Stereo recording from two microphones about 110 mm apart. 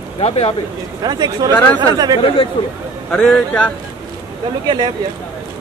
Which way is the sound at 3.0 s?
10° left (ahead or behind).